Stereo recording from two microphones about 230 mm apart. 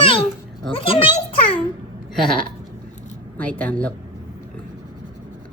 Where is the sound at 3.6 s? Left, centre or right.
Centre.